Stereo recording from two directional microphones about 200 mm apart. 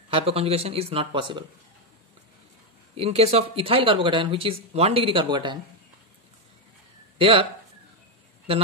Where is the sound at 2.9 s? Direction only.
30° right (ahead or behind).